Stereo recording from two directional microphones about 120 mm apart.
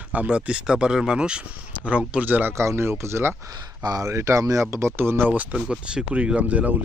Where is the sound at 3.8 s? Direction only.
30° right (ahead or behind).